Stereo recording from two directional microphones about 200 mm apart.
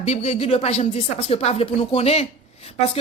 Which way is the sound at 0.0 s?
30° left (ahead or behind).